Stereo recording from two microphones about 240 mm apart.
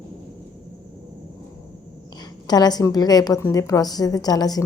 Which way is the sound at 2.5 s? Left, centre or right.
Centre.